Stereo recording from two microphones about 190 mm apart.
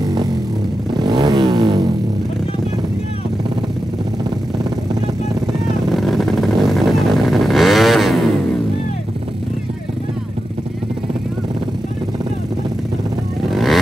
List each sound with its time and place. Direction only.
0.0 s music: 20° right (ahead or behind)
0.9 s vehicle: 25° right (ahead or behind)
5.9 s vehicle: centre (ahead or behind)
13.5 s vehicle: centre (ahead or behind)